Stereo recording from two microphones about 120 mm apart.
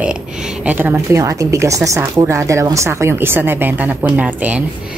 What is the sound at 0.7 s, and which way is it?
Speech, 15° right (ahead or behind).